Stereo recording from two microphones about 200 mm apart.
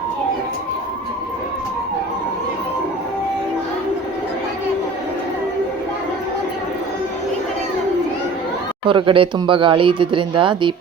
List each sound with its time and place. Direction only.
8.9 s speech: 25° right (ahead or behind)